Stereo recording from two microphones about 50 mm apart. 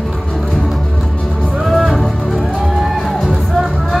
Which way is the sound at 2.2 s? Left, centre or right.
Centre.